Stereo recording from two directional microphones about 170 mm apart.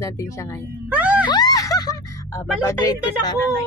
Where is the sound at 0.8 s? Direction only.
10° right (ahead or behind).